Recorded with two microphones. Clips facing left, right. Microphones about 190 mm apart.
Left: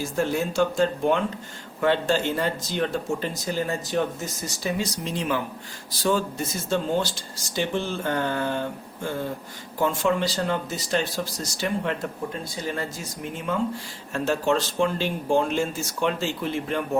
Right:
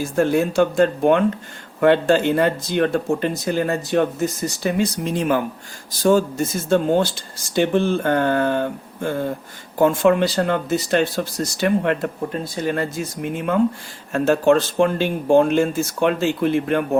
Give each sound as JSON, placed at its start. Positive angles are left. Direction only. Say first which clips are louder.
{"t": 0.2, "sound": "speech", "louder": "right 6 dB", "side_deg": -60}